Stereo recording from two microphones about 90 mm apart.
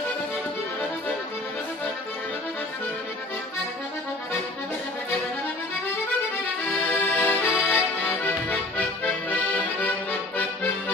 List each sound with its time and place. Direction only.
6.9 s accordion: 20° left (ahead or behind)